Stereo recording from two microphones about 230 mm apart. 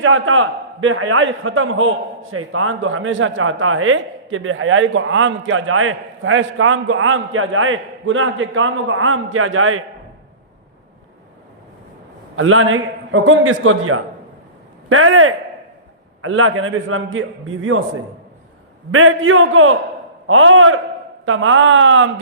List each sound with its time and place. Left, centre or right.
0.0 s speech: right
12.4 s a man's voice: right
18.9 s speech: right